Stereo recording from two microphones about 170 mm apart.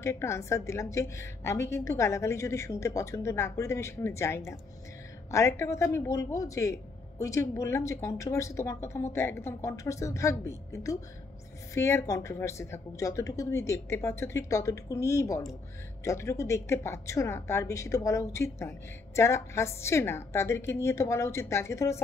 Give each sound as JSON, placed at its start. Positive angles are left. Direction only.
{"t": 0.0, "sound": "a woman's voice", "side_deg": 15}